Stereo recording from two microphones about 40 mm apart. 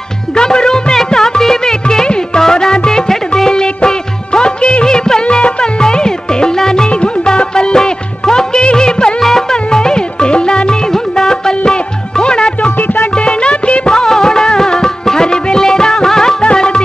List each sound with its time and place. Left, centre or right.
0.4 s music: centre
5.2 s music: left
6.9 s music of bollywood: left
9.2 s music: centre
12.7 s music: left
13.1 s music of bollywood: left
16.5 s music: left